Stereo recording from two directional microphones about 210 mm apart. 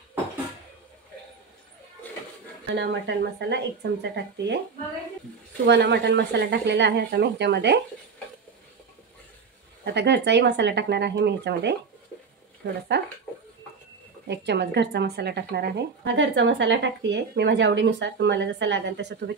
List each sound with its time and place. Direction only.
2.8 s speech: 55° right (ahead or behind)
5.7 s speech: 55° right (ahead or behind)
9.8 s speech: 55° right (ahead or behind)
12.9 s speech: 50° right (ahead or behind)
14.2 s speech: 55° right (ahead or behind)